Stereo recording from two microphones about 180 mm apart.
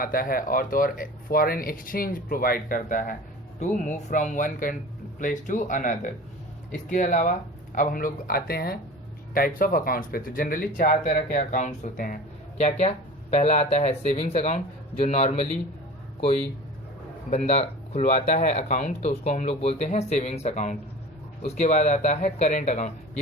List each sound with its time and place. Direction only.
0.0 s speech: 55° left (ahead or behind); by 15.4 s 35° left (ahead or behind)
17.3 s speech: 35° left (ahead or behind)